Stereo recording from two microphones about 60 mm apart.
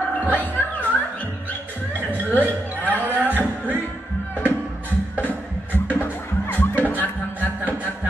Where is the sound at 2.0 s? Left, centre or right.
Right.